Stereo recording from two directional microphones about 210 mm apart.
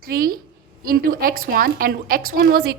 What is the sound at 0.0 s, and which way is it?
A woman's voice, 45° right (ahead or behind).